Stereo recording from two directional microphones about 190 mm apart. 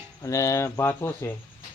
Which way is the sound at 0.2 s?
15° left (ahead or behind).